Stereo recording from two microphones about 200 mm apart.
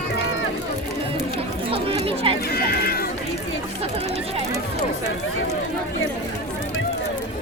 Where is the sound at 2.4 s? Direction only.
50° left (ahead or behind).